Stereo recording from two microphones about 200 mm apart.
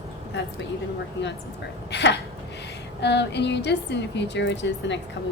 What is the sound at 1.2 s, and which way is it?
Speech, 65° left (ahead or behind).